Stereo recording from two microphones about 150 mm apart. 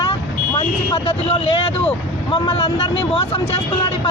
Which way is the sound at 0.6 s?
40° left (ahead or behind).